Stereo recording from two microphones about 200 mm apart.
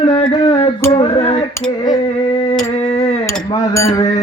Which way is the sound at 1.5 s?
15° left (ahead or behind).